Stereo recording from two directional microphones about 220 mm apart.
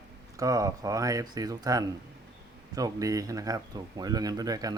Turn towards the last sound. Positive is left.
turn(degrees=-15)  # may be behind; listen again after turning